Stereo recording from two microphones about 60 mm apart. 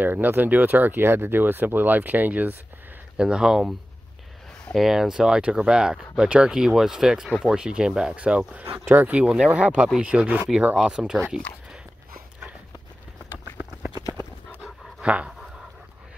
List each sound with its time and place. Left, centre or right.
0.0 s speech: right
3.2 s speech: centre
4.7 s speech: centre
8.8 s speech: right
10.9 s speech: centre
15.0 s a sound: centre